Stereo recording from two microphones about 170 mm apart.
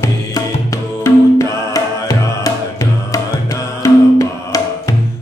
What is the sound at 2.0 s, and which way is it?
Music, 20° left (ahead or behind).